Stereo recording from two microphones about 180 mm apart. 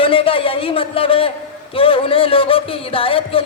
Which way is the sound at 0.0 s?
30° left (ahead or behind).